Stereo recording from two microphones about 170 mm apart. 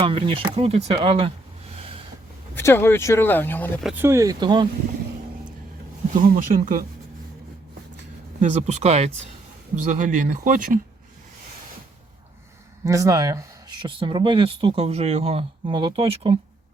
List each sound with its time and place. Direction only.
0.0 s speech: 30° right (ahead or behind)
2.6 s speech: 15° left (ahead or behind)
3.9 s speech: 15° right (ahead or behind)
6.1 s speech: 55° right (ahead or behind)
8.4 s speech: 45° right (ahead or behind)
12.8 s speech: 20° right (ahead or behind)